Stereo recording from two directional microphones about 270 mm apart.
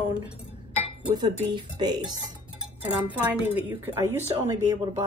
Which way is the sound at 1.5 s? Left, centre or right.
Centre.